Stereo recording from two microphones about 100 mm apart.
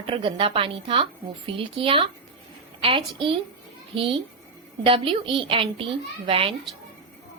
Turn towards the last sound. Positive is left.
turn(degrees=-65)  # may be behind; listen again after turning